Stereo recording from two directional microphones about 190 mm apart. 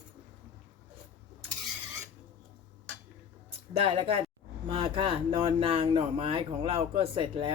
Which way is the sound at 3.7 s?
30° right (ahead or behind).